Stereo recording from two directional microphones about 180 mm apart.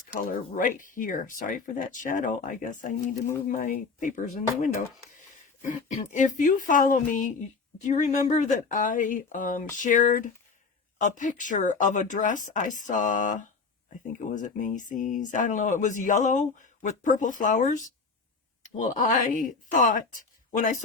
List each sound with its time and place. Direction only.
0.1 s speech: 50° left (ahead or behind)
5.6 s speech: 45° left (ahead or behind)